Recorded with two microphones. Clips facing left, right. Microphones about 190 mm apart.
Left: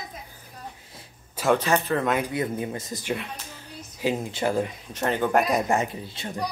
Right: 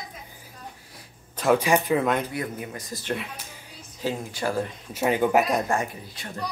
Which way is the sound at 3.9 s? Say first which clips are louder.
Left 3 dB; 15° left (ahead or behind).